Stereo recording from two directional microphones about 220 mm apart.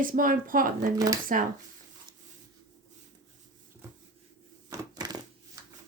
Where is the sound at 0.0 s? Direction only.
40° right (ahead or behind).